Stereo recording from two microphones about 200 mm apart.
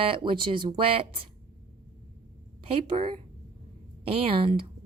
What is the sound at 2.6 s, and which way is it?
A woman's voice, 25° right (ahead or behind).